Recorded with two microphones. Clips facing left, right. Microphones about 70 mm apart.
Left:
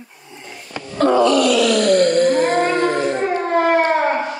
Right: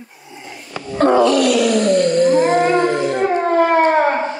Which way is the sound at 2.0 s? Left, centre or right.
Left.